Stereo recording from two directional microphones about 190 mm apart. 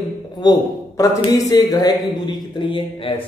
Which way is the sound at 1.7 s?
20° left (ahead or behind).